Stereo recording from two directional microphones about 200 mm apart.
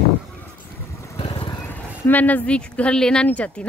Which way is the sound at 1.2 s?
25° left (ahead or behind).